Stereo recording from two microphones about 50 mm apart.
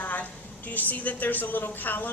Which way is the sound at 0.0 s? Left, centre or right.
Left.